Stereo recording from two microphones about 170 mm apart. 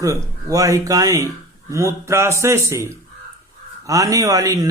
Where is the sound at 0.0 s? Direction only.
20° right (ahead or behind).